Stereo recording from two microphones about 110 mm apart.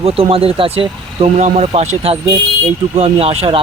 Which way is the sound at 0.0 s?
60° right (ahead or behind).